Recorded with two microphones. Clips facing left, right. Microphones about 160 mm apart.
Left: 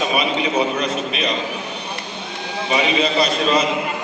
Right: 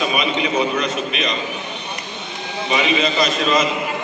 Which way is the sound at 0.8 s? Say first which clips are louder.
Even; 30° left (ahead or behind).